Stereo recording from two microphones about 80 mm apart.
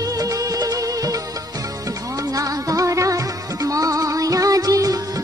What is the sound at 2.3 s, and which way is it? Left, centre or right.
Music, right.